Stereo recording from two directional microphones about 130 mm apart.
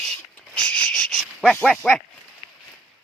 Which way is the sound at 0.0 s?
5° left (ahead or behind).